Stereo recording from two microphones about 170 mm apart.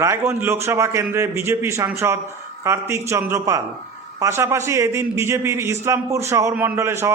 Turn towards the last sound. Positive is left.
turn(degrees=-15)  # may be behind; listen again after turning